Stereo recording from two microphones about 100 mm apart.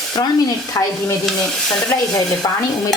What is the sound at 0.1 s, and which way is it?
Speech, 45° left (ahead or behind).